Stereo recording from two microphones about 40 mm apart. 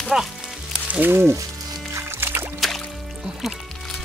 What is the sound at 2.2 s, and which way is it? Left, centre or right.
Music, right.